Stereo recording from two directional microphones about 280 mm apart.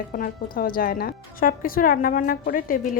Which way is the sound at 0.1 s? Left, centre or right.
Left.